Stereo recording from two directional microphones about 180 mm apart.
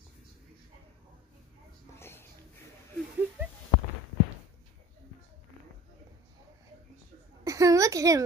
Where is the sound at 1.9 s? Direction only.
15° left (ahead or behind).